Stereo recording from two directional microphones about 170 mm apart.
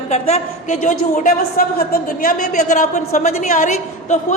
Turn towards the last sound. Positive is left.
turn(degrees=45)  # may be behind; listen again after turning